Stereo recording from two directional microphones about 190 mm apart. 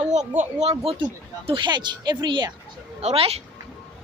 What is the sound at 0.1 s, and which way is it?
Speech, 40° right (ahead or behind).